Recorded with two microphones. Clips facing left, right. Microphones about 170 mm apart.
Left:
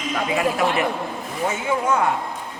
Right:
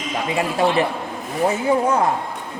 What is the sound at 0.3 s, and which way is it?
A man's voice, 30° right (ahead or behind).